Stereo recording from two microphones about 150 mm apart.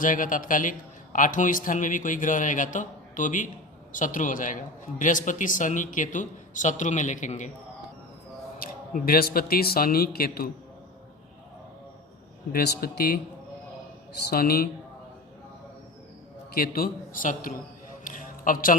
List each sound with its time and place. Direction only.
0.0 s a man's voice: 65° left (ahead or behind)
8.5 s speech: 75° left (ahead or behind)
12.5 s speech: 90° left
14.3 s speech: 90° left
16.6 s a man's voice: 75° left (ahead or behind)
18.0 s a sound: 60° left (ahead or behind)